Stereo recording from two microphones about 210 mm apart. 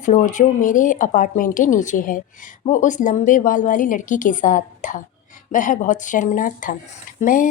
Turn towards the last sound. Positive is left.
turn(degrees=40)  # may be behind; listen again after turning